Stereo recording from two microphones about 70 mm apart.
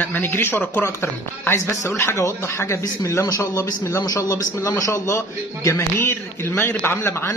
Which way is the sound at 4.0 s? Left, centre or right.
Left.